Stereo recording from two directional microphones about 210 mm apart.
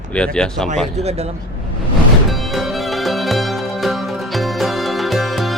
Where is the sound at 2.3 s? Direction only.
Centre (ahead or behind).